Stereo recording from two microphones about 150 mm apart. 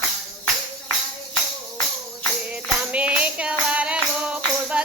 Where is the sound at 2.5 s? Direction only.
10° right (ahead or behind).